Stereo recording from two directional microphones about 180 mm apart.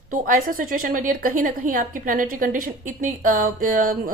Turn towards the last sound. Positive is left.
turn(degrees=-50)  # may be behind; listen again after turning